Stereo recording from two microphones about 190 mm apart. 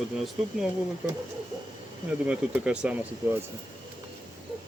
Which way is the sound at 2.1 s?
5° right (ahead or behind).